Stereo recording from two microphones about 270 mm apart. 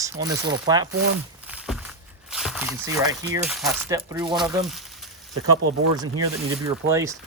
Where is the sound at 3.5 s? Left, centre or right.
Centre.